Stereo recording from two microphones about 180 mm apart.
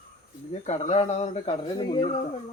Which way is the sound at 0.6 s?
35° left (ahead or behind).